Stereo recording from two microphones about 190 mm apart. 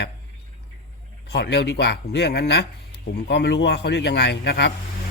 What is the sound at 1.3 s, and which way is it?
Speech, 65° left (ahead or behind).